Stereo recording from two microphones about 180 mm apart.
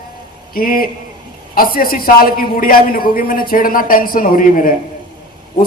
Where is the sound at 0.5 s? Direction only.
55° left (ahead or behind).